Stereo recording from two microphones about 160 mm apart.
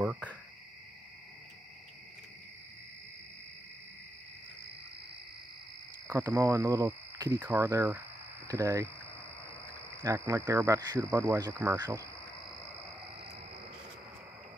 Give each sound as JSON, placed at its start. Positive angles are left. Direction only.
{"t": 0.0, "sound": "cricket", "side_deg": -5}
{"t": 6.0, "sound": "speech", "side_deg": -15}
{"t": 10.0, "sound": "speech", "side_deg": -20}